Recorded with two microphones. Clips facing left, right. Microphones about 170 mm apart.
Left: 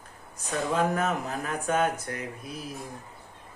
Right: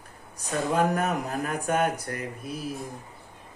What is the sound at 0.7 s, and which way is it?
Speech, 35° right (ahead or behind).